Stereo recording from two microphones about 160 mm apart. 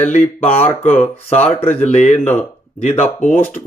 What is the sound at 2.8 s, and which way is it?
Speech, 45° left (ahead or behind).